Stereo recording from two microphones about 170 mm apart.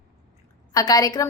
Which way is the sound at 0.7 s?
20° left (ahead or behind).